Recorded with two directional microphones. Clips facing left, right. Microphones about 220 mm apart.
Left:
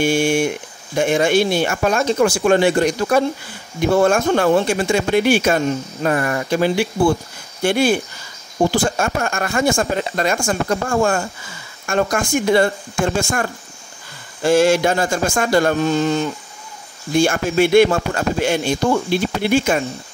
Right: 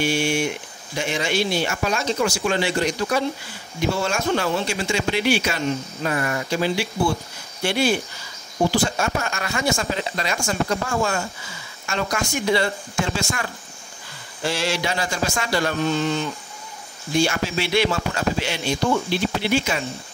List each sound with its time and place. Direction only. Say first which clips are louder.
0.0 s speech: left 5 dB; 50° left (ahead or behind)